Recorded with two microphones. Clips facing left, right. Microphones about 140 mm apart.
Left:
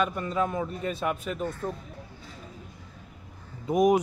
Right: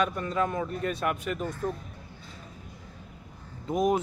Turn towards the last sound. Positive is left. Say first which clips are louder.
# left 4 dB
turn(degrees=15)  # may be behind; listen again after turning